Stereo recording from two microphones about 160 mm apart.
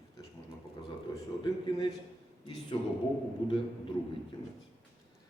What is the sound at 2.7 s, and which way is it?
Speech, 35° left (ahead or behind).